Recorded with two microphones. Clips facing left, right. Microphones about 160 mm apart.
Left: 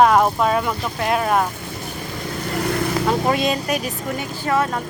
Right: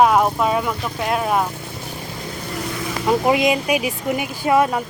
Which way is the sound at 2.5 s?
60° left (ahead or behind).